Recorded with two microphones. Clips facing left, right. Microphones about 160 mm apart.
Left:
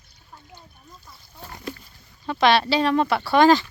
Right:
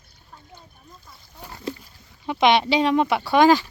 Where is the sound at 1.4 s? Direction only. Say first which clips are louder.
Even; 15° right (ahead or behind).